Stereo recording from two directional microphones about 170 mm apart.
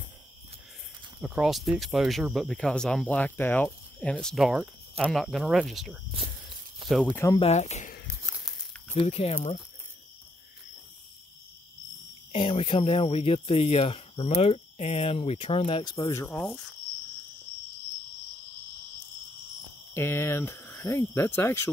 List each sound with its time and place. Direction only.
1.2 s speech: 5° right (ahead or behind)
7.1 s speech: 15° left (ahead or behind)
7.3 s speech: 40° left (ahead or behind)
8.9 s speech: 35° left (ahead or behind)
12.3 s speech: 35° left (ahead or behind); by 16.3 s 15° left (ahead or behind)
16.3 s speech: 5° left (ahead or behind)
19.9 s speech: 15° left (ahead or behind)